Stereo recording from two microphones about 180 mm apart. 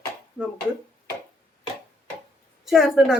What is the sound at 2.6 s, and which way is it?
Speech, centre (ahead or behind).